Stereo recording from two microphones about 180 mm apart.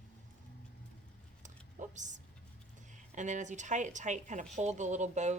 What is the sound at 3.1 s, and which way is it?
Speech, 40° right (ahead or behind).